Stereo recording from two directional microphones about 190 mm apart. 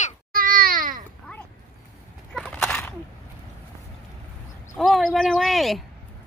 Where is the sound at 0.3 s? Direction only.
50° right (ahead or behind).